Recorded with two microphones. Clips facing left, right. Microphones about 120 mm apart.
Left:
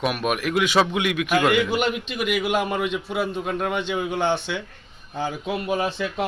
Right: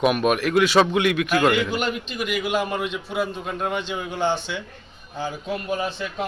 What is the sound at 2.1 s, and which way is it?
Speech, 65° left (ahead or behind).